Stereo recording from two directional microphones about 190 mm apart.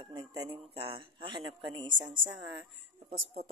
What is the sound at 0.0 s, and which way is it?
Speech, 20° right (ahead or behind).